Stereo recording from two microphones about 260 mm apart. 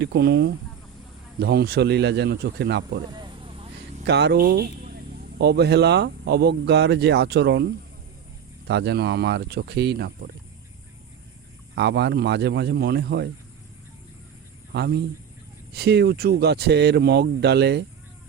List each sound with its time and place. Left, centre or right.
0.0 s speech: right
3.1 s a sound: centre
4.0 s speech: right
11.7 s speech: right
14.7 s a man's voice: right